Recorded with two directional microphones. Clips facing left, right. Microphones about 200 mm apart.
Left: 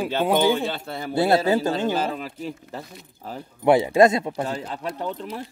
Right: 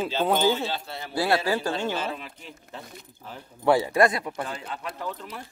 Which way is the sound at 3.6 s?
20° left (ahead or behind).